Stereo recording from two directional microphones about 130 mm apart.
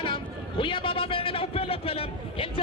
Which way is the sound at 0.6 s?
40° left (ahead or behind).